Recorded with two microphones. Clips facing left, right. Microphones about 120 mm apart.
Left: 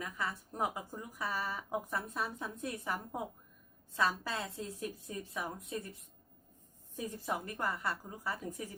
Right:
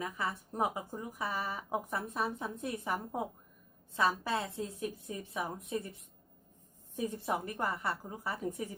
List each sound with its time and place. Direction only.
0.0 s speech: 20° right (ahead or behind)
6.9 s speech: 25° right (ahead or behind)